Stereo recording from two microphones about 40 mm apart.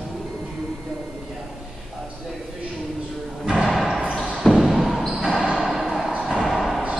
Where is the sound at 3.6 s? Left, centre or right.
Centre.